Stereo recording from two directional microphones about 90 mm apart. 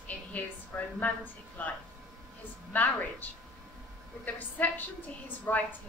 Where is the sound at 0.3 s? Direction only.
20° left (ahead or behind).